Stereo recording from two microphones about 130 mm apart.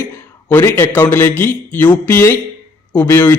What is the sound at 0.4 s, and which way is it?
A man's voice, 15° left (ahead or behind).